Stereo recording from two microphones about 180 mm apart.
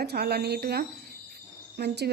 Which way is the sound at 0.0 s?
60° right (ahead or behind).